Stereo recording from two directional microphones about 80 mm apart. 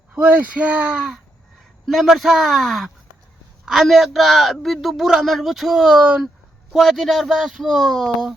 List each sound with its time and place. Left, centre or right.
0.1 s speech: centre
1.9 s speech: centre